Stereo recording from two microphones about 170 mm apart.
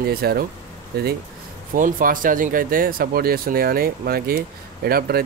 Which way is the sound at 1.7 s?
50° right (ahead or behind).